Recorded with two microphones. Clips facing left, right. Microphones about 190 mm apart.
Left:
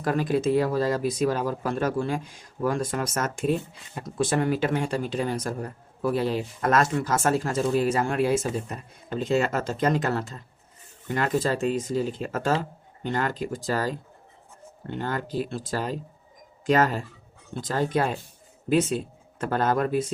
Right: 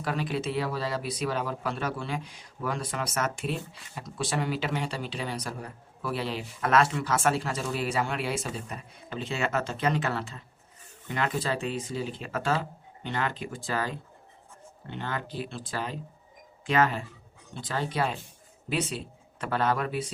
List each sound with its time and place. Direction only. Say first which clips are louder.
0.0 s speech: left 7 dB; 45° left (ahead or behind)